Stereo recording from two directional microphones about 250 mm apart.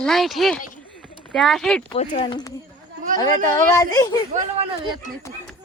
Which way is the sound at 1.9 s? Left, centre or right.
Left.